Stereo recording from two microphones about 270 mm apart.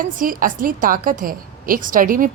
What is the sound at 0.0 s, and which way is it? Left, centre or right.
A woman's voice, right.